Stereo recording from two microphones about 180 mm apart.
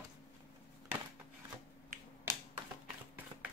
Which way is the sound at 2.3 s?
15° right (ahead or behind).